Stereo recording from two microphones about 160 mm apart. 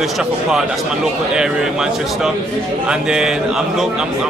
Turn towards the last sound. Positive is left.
turn(degrees=-5)  # may be behind; listen again after turning